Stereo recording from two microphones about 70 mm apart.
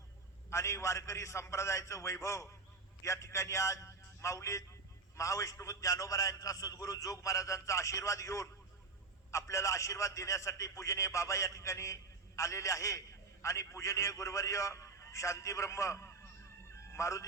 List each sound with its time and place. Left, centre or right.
0.5 s a man's voice: left